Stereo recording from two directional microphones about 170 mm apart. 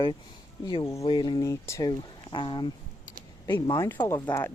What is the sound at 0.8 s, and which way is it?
Speech, 20° left (ahead or behind).